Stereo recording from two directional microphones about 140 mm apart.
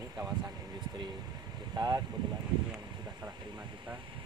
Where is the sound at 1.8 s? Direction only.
30° right (ahead or behind).